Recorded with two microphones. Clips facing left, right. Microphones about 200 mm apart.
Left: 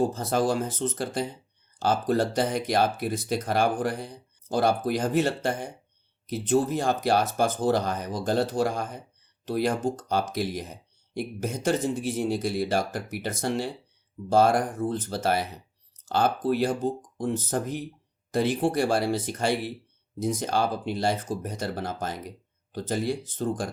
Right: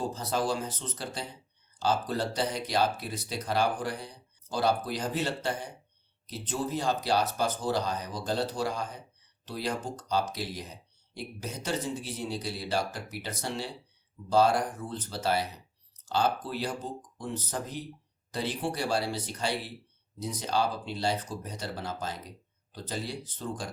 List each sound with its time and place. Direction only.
0.0 s speech: 50° left (ahead or behind)